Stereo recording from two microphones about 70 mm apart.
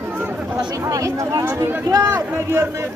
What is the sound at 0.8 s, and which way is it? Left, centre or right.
Speech, right.